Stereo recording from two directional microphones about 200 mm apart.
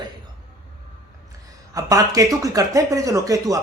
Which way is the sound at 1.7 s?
15° right (ahead or behind).